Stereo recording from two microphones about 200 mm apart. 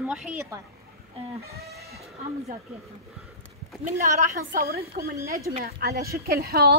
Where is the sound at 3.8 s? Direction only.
40° right (ahead or behind).